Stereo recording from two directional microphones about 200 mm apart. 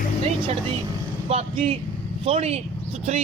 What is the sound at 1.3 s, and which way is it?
A man's voice, 30° right (ahead or behind).